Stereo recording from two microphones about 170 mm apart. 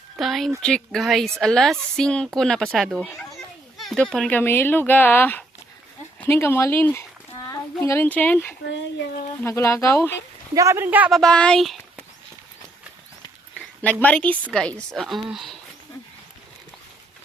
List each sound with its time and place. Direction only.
0.2 s a child's voice: centre (ahead or behind)
8.6 s a sound: 90° left
9.4 s speech: 15° left (ahead or behind)
10.5 s speech: 20° right (ahead or behind)
11.2 s speech: 5° left (ahead or behind)
14.0 s speech: 10° left (ahead or behind)